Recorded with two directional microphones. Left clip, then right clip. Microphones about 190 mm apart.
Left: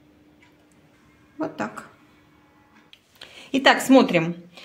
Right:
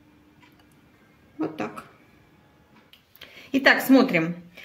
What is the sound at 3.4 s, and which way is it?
Speech, 30° left (ahead or behind).